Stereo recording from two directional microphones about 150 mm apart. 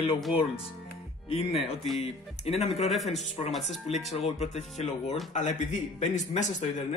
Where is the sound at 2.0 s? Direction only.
45° left (ahead or behind).